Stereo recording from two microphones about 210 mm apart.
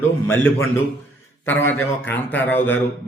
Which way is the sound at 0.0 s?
10° left (ahead or behind).